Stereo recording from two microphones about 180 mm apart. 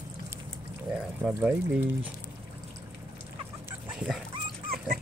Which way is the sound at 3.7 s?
5° right (ahead or behind).